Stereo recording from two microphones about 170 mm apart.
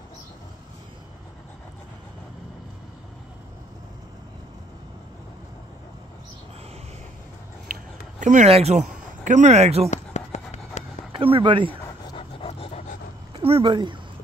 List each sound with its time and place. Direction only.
7.7 s a sound: 55° right (ahead or behind)
8.2 s speech: 45° right (ahead or behind)
9.8 s a sound: 45° left (ahead or behind)
11.1 s speech: 30° right (ahead or behind)
12.1 s dog: 35° left (ahead or behind)
13.4 s speech: 35° right (ahead or behind)